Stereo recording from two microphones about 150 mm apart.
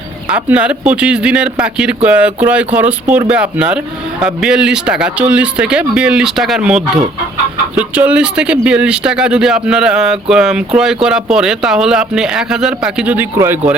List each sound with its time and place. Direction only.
0.3 s speech: 10° right (ahead or behind)
13.3 s speech: 20° right (ahead or behind)